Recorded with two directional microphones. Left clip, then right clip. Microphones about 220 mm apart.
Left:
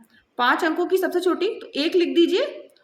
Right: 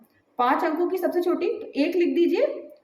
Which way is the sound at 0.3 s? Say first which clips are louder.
Left 2 dB; 30° left (ahead or behind).